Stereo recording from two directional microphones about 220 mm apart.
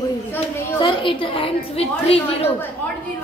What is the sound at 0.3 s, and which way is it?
A woman's voice, 20° left (ahead or behind).